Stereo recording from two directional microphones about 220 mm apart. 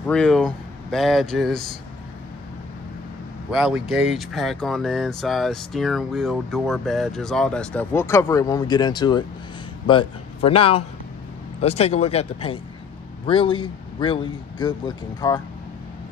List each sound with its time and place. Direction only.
0.0 s speech: 5° left (ahead or behind)
3.5 s a man's voice: 5° right (ahead or behind); by 15.4 s 20° left (ahead or behind)